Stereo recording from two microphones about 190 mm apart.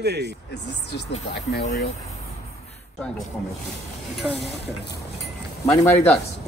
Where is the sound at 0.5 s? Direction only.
65° left (ahead or behind).